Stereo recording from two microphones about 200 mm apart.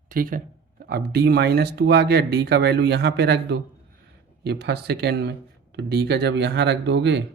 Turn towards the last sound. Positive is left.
turn(degrees=-60)  # may be behind; listen again after turning